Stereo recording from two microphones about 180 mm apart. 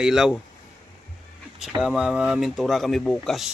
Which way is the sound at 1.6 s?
Centre (ahead or behind).